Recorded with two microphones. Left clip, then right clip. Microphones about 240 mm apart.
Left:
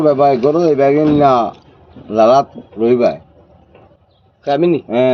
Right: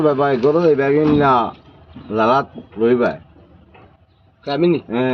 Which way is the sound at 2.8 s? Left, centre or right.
Centre.